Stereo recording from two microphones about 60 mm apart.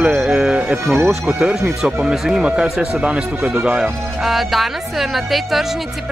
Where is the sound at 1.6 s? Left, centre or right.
Centre.